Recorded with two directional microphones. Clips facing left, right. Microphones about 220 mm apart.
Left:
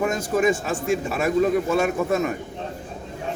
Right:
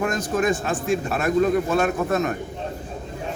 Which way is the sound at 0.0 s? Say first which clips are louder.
Left 1 dB; 10° left (ahead or behind).